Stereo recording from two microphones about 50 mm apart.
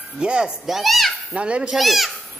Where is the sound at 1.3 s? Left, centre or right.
Right.